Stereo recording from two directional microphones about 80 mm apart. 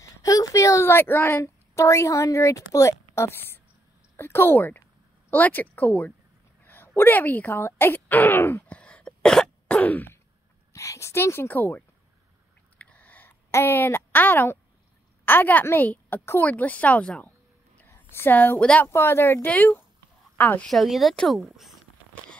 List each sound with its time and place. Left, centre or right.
0.0 s a sound: left
1.4 s a woman's voice: left
6.6 s a sound: left
7.0 s speech: left
8.6 s cough: centre
9.8 s throat clearing: left
10.7 s a woman's voice: left
12.7 s a sound: centre
13.5 s speech: left
17.8 s a woman's voice: left
18.9 s a woman's voice: left
20.6 s speech: centre